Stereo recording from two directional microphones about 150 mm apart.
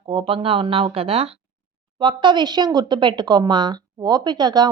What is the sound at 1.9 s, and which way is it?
Speech, 30° right (ahead or behind).